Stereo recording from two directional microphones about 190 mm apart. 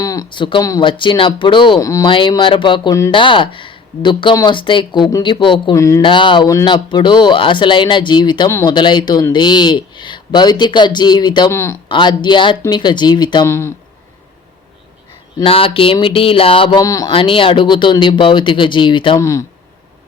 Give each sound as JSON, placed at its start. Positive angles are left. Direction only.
{"t": 0.0, "sound": "speech", "side_deg": 20}
{"t": 11.9, "sound": "speech", "side_deg": 25}
{"t": 15.4, "sound": "speech", "side_deg": 30}
{"t": 17.1, "sound": "speech", "side_deg": 25}